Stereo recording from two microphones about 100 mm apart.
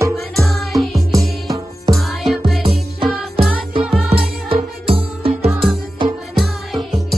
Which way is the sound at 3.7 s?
75° right (ahead or behind).